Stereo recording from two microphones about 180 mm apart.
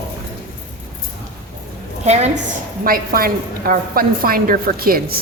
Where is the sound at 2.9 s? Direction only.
55° right (ahead or behind).